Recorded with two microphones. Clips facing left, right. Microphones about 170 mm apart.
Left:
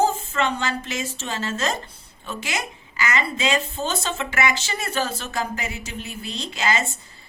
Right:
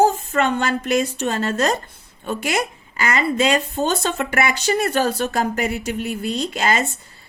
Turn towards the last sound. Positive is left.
turn(degrees=-55)  # may be behind; listen again after turning